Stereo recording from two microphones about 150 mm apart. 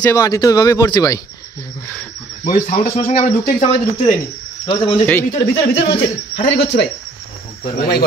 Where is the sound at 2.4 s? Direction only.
50° left (ahead or behind).